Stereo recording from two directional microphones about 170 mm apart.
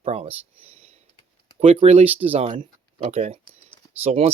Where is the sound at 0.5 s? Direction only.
35° right (ahead or behind).